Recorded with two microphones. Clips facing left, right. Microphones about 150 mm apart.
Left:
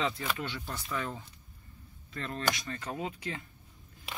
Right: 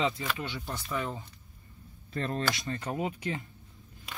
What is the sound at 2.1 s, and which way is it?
Speech, 35° right (ahead or behind).